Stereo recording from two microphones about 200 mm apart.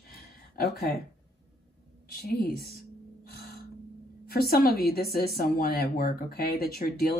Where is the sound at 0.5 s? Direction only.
50° left (ahead or behind).